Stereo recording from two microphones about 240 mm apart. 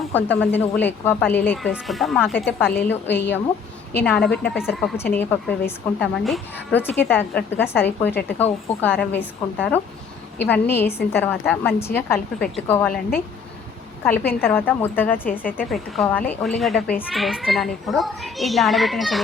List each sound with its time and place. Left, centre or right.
0.3 s a child's voice: centre
3.1 s speech: left
3.9 s a child's voice: centre
12.9 s speech: left
14.0 s a woman's voice: centre
15.4 s speech: left
15.7 s a child's voice: centre